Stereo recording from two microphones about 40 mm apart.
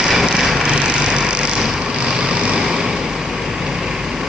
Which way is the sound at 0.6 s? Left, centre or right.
Right.